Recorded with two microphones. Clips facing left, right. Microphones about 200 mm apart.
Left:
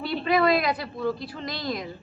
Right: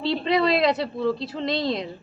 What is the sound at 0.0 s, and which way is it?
A woman's voice, 25° right (ahead or behind).